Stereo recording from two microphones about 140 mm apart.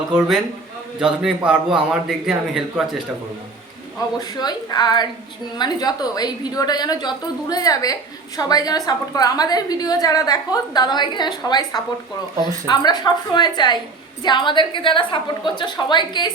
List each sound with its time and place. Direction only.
0.1 s a man's voice: 5° right (ahead or behind)
4.4 s a woman's voice: 30° left (ahead or behind)